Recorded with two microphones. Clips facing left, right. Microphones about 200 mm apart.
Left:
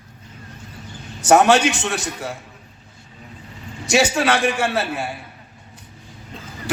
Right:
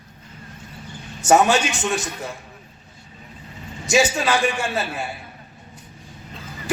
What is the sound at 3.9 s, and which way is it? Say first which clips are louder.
Speech: left 1 dB; 70° left (ahead or behind).